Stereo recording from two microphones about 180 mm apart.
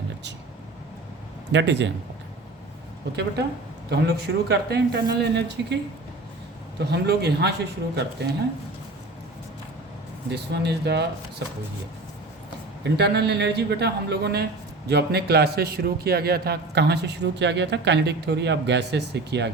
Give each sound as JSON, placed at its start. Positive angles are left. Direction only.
{"t": 1.5, "sound": "a man's voice", "side_deg": -75}
{"t": 3.8, "sound": "speech", "side_deg": -65}
{"t": 10.3, "sound": "a man's voice", "side_deg": -65}
{"t": 12.8, "sound": "a man's voice", "side_deg": -65}